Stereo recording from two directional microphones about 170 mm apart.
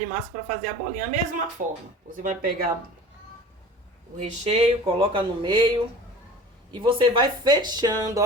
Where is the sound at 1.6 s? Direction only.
55° right (ahead or behind).